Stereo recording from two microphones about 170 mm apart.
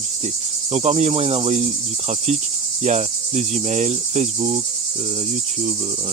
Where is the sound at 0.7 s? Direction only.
40° right (ahead or behind).